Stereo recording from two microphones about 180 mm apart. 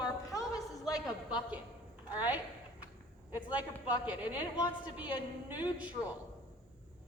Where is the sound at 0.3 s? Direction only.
20° left (ahead or behind).